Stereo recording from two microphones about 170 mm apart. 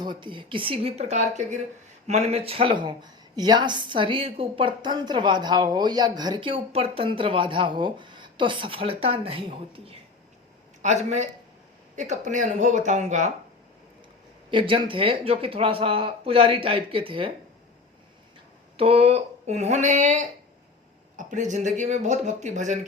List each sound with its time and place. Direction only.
0.0 s speech: 25° right (ahead or behind); by 13.3 s 45° right (ahead or behind)
14.5 s speech: 30° right (ahead or behind)
18.8 s speech: 35° right (ahead or behind)